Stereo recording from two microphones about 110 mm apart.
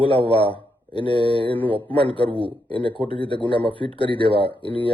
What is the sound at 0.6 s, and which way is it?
Mantra, 50° left (ahead or behind).